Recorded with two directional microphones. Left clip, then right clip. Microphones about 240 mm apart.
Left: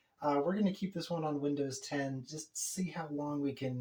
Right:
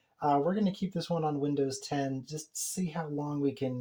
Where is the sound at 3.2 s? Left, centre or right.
Right.